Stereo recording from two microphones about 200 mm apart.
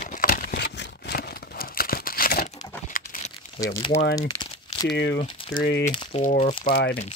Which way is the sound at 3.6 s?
15° left (ahead or behind).